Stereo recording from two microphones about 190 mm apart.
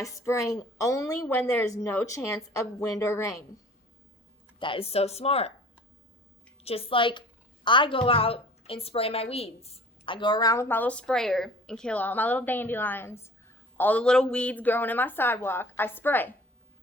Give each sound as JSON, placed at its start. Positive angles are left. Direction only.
{"t": 0.0, "sound": "a woman's voice", "side_deg": 15}
{"t": 4.6, "sound": "speech", "side_deg": 30}
{"t": 6.7, "sound": "a woman's voice", "side_deg": 30}